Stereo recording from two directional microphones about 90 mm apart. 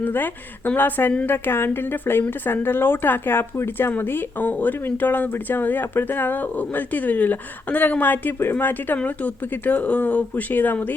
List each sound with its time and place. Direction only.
0.0 s speech: 20° left (ahead or behind)